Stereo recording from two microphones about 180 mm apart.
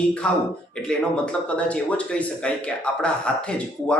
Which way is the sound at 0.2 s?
5° left (ahead or behind).